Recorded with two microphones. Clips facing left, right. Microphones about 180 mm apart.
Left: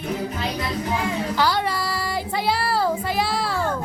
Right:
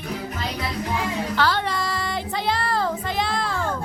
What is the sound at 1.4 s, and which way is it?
Child singing, 10° left (ahead or behind).